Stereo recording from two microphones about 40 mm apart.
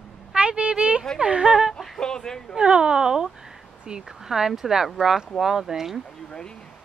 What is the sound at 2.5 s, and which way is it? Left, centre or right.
A woman's voice, right.